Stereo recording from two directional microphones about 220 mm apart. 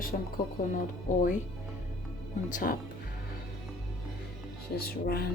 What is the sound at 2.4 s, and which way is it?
Speech, 40° left (ahead or behind).